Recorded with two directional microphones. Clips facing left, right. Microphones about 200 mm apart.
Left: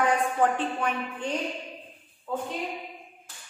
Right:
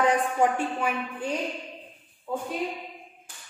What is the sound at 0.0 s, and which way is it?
A woman's voice, 15° right (ahead or behind).